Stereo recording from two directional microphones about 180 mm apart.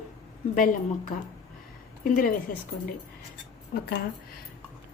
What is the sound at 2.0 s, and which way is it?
Speech, 50° left (ahead or behind).